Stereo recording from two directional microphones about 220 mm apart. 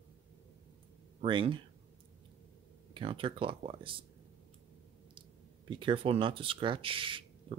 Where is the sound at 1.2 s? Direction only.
25° right (ahead or behind).